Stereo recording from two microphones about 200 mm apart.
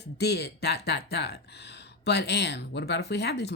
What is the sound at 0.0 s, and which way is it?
Speech, 55° left (ahead or behind).